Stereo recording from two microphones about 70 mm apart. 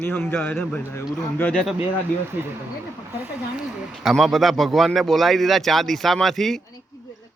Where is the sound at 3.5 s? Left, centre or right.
Centre.